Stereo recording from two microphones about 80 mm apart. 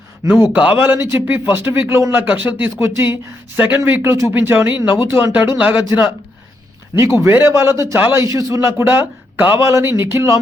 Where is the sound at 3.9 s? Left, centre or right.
Right.